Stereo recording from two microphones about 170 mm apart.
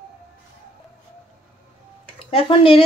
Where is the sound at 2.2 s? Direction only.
30° left (ahead or behind).